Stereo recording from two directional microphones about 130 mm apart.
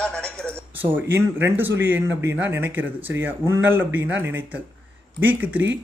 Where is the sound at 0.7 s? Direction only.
15° right (ahead or behind).